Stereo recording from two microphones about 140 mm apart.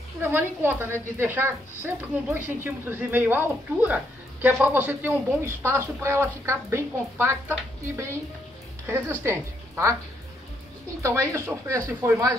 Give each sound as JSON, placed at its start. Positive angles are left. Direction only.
{"t": 0.2, "sound": "a woman's voice", "side_deg": -15}
{"t": 11.0, "sound": "speech", "side_deg": -20}